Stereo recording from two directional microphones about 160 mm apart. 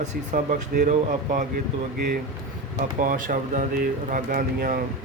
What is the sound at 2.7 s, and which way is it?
Speech, 60° right (ahead or behind).